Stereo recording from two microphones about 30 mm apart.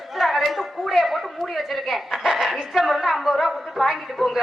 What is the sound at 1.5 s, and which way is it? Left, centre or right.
Bow-wow, centre.